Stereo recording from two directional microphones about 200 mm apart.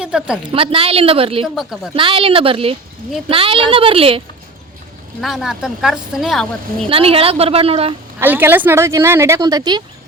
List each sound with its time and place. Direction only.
0.0 s speech: 5° right (ahead or behind)
0.5 s a woman's voice: 25° right (ahead or behind)
1.5 s speech: centre (ahead or behind)
2.0 s a woman's voice: 25° right (ahead or behind)
5.2 s speech: centre (ahead or behind)
6.9 s a woman's voice: 30° right (ahead or behind)
8.2 s speech: 10° right (ahead or behind)